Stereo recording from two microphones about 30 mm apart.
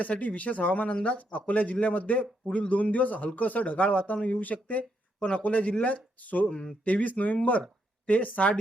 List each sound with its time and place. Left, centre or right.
0.2 s speech: left
6.8 s speech: left
7.1 s speech: left
8.0 s speech: left